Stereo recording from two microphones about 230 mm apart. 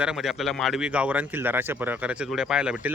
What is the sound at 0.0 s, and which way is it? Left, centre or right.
Speech, centre.